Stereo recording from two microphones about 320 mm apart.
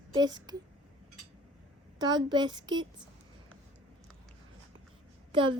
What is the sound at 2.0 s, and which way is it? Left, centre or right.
Speech, centre.